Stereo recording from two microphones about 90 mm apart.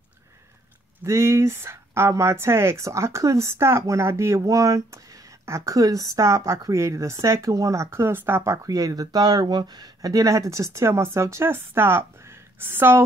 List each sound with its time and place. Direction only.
1.0 s speech: 30° right (ahead or behind)
8.6 s speech: 40° right (ahead or behind); by 13.0 s 25° right (ahead or behind)